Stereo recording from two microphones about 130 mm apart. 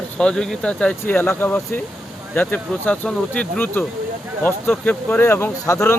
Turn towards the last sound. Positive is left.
turn(degrees=25)  # may be behind; listen again after turning